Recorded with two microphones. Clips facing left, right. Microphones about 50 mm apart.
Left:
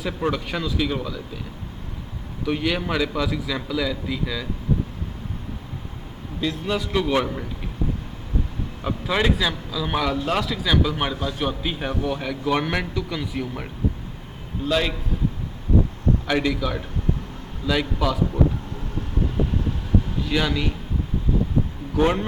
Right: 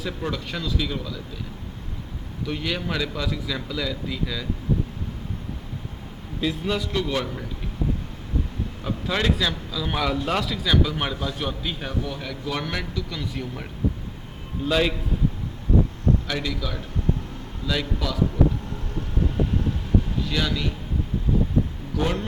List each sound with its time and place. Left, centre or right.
0.0 s a man's voice: centre
2.4 s a man's voice: centre
6.7 s a man's voice: centre
7.0 s a man's voice: centre
9.0 s a man's voice: centre
11.6 s a man's voice: centre
14.7 s a man's voice: centre
16.2 s a man's voice: left
20.2 s a man's voice: centre
21.9 s a man's voice: left